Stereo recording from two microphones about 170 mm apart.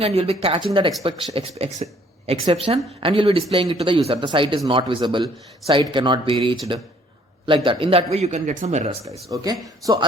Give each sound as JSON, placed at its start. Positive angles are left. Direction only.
{"t": 0.0, "sound": "a woman's voice", "side_deg": -35}
{"t": 9.3, "sound": "speech", "side_deg": -20}